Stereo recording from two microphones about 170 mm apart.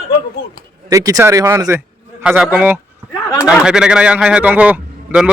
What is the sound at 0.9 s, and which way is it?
A man's voice, 20° right (ahead or behind).